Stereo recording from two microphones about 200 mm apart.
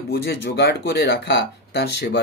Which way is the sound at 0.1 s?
55° left (ahead or behind).